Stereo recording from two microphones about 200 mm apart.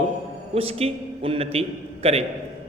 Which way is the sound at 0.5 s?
30° right (ahead or behind).